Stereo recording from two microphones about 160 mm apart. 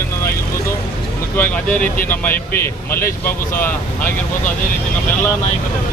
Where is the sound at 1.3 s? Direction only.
10° left (ahead or behind).